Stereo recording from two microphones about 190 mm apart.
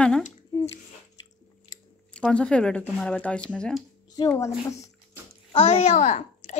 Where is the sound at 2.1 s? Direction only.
5° left (ahead or behind).